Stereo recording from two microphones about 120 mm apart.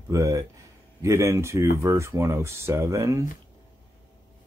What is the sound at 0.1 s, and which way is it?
A man's voice, 25° right (ahead or behind).